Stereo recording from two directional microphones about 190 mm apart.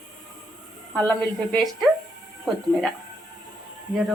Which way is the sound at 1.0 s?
10° left (ahead or behind).